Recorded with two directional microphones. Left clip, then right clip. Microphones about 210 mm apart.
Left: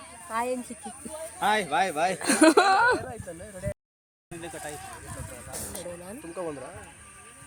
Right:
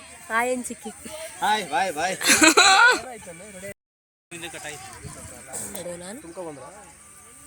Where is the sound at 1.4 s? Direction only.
25° left (ahead or behind).